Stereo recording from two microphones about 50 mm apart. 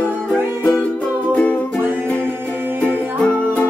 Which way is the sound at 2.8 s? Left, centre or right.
Left.